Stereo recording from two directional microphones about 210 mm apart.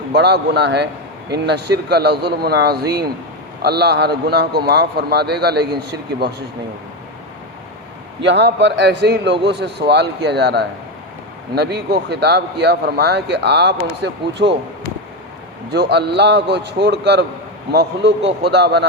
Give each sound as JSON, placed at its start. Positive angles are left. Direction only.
{"t": 0.1, "sound": "speech", "side_deg": -50}
{"t": 8.2, "sound": "speech", "side_deg": -55}
{"t": 15.7, "sound": "speech", "side_deg": -50}